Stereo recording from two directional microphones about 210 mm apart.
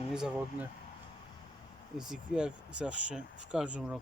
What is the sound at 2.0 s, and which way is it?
Speech, 5° right (ahead or behind).